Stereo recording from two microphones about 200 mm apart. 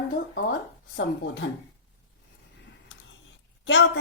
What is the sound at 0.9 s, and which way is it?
Speech, 65° left (ahead or behind).